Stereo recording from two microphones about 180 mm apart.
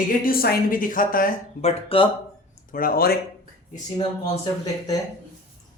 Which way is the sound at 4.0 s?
35° left (ahead or behind).